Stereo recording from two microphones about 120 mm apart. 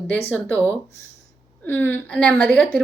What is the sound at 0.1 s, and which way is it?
Speech, 15° left (ahead or behind).